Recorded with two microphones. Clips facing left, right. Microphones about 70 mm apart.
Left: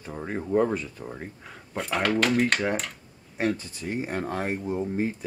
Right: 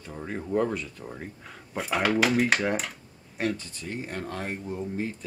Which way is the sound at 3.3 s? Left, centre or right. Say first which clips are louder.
Left 2 dB; centre.